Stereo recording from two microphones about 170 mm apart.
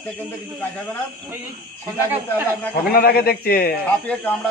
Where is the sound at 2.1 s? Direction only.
10° right (ahead or behind).